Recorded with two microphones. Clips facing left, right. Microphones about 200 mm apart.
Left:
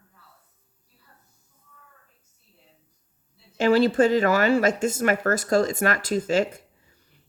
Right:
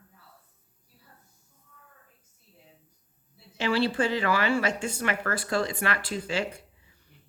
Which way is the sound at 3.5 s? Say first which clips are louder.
Left 7 dB; 45° left (ahead or behind).